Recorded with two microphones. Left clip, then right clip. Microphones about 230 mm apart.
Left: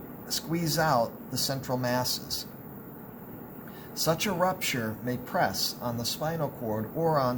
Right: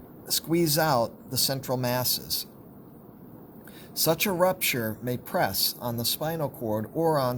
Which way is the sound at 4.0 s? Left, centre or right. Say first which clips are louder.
Right 3 dB; right.